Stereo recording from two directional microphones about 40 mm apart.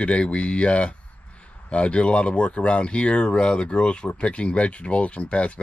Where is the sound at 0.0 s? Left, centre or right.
Left.